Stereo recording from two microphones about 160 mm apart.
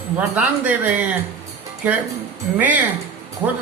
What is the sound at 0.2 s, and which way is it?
Speech, 10° right (ahead or behind).